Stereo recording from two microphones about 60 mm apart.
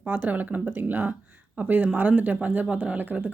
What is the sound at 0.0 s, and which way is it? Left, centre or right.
Speech, right.